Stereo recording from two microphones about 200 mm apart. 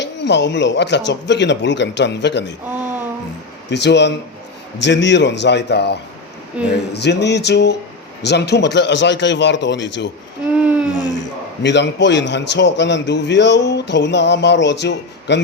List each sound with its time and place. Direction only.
0.0 s a man's voice: 60° left (ahead or behind)
3.7 s a man's voice: 60° left (ahead or behind)
10.5 s a sound: 5° right (ahead or behind)
11.6 s a man's voice: 60° left (ahead or behind)